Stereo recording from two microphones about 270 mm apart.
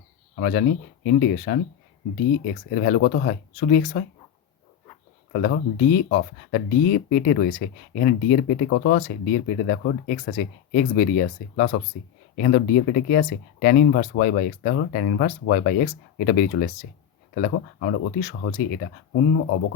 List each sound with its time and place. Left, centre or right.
0.3 s speech: left
5.3 s speech: left